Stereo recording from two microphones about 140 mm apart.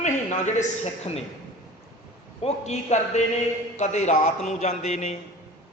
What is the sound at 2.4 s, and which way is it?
A man's voice, 55° left (ahead or behind).